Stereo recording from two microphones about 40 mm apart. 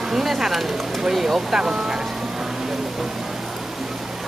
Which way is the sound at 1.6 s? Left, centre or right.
Right.